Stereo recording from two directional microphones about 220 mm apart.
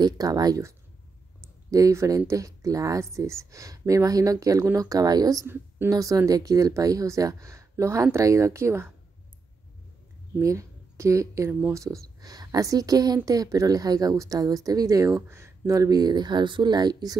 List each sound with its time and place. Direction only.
0.0 s speech: 15° right (ahead or behind)
10.4 s speech: 15° right (ahead or behind)